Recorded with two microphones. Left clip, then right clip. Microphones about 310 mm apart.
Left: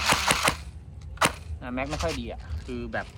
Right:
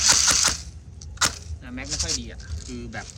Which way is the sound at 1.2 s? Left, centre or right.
Centre.